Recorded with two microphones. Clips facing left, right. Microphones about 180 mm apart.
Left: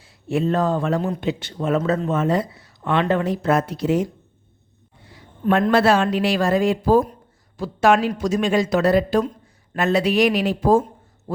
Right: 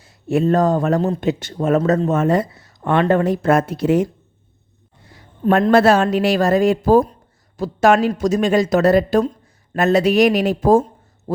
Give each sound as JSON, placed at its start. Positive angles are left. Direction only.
{"t": 0.0, "sound": "speech", "side_deg": -45}
{"t": 5.7, "sound": "speech", "side_deg": -45}